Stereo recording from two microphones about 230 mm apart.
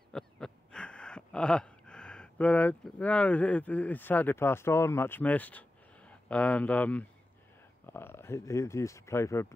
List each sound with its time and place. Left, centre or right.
0.1 s gasp: centre
7.8 s speech: centre